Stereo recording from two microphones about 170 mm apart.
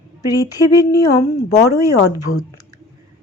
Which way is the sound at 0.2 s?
20° left (ahead or behind).